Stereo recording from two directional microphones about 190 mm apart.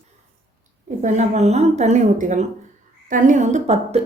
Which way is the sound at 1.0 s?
40° right (ahead or behind).